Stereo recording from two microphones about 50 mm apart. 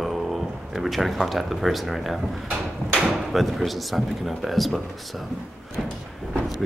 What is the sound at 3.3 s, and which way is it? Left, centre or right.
Speech, centre.